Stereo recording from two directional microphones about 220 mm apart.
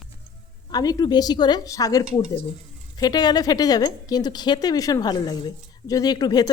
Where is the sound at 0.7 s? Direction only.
15° left (ahead or behind).